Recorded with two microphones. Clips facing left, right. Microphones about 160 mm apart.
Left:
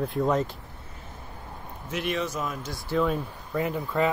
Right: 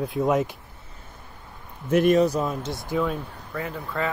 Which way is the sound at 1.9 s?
45° right (ahead or behind).